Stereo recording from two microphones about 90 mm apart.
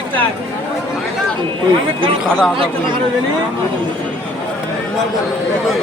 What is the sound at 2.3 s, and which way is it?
Speech, 5° left (ahead or behind).